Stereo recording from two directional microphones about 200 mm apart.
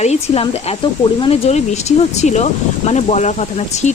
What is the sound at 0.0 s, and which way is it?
Speech, 30° left (ahead or behind).